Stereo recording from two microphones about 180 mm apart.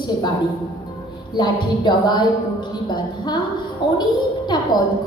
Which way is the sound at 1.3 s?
25° left (ahead or behind).